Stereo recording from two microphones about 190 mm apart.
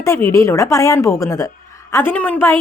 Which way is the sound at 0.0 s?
15° left (ahead or behind).